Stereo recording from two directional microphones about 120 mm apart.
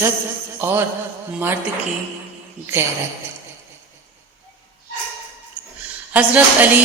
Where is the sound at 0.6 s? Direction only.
20° right (ahead or behind).